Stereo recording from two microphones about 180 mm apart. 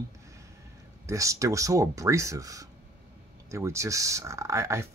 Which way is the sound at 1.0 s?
15° right (ahead or behind).